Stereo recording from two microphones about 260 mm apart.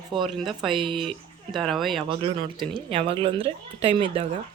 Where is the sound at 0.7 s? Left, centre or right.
Centre.